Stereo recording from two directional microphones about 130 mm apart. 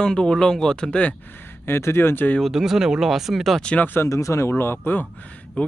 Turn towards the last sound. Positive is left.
turn(degrees=10)  # may be behind; listen again after turning